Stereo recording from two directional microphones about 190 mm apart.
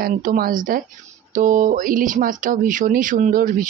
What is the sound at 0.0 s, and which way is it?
Speech, 50° right (ahead or behind).